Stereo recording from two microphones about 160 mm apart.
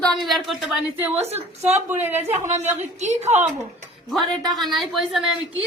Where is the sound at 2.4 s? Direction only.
45° right (ahead or behind).